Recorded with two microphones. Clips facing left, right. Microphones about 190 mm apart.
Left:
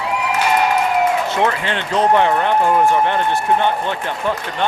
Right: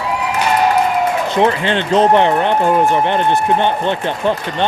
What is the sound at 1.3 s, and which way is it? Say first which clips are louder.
Speech: right 4 dB; 20° right (ahead or behind).